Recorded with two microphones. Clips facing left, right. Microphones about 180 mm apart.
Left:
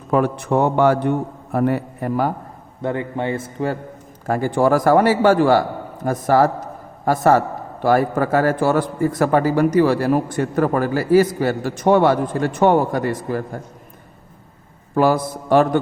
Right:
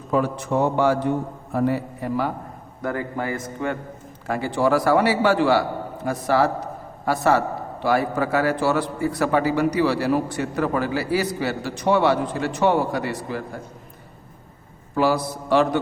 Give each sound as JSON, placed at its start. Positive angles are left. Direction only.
{"t": 0.1, "sound": "a man's voice", "side_deg": 60}
{"t": 2.8, "sound": "a man's voice", "side_deg": 25}
{"t": 4.3, "sound": "a man's voice", "side_deg": 45}
{"t": 14.9, "sound": "a man's voice", "side_deg": 50}